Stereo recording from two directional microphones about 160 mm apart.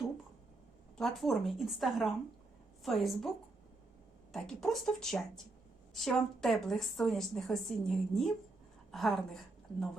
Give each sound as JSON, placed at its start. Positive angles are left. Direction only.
{"t": 0.9, "sound": "a woman's voice", "side_deg": 0}